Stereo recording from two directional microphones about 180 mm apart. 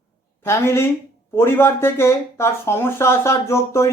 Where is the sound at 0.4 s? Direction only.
15° left (ahead or behind).